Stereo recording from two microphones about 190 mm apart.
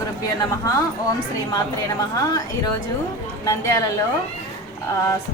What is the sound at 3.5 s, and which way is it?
Speech, 15° left (ahead or behind).